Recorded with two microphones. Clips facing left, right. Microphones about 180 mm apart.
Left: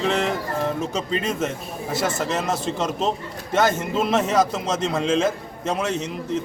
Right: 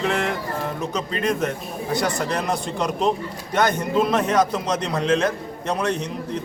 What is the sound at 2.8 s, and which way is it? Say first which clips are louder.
Speech: right 5 dB; 25° left (ahead or behind).